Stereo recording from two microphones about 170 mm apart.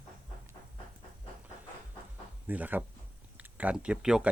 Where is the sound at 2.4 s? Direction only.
10° right (ahead or behind).